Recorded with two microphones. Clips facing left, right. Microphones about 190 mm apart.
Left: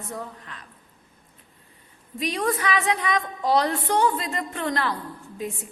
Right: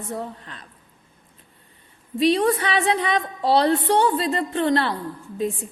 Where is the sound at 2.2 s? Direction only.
30° right (ahead or behind).